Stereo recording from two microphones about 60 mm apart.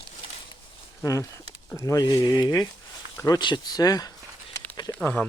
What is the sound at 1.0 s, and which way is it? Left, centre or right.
Speech, left.